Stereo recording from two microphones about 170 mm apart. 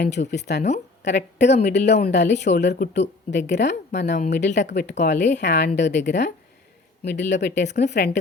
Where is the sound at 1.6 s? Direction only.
75° left (ahead or behind).